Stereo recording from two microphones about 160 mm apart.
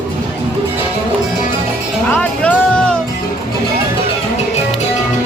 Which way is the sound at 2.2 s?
5° left (ahead or behind).